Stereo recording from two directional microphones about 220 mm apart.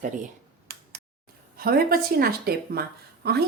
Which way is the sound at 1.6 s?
40° right (ahead or behind).